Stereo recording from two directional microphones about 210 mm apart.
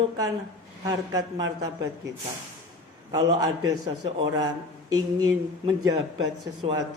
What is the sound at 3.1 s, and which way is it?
A man's voice, 20° right (ahead or behind).